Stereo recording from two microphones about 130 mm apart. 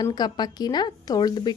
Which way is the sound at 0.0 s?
30° left (ahead or behind).